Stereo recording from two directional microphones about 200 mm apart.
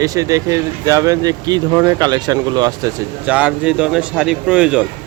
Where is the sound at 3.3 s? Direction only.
5° right (ahead or behind).